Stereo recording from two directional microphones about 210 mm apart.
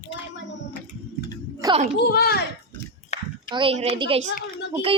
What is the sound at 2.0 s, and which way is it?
Speech, 50° left (ahead or behind).